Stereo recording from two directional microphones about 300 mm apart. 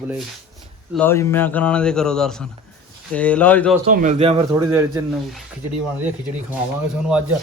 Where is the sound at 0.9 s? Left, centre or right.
Centre.